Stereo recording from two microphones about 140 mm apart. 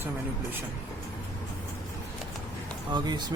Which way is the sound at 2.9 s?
30° right (ahead or behind).